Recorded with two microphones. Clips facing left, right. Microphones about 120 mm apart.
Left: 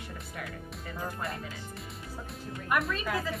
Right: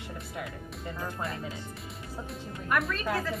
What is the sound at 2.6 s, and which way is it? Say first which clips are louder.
Speech: even; 5° left (ahead or behind).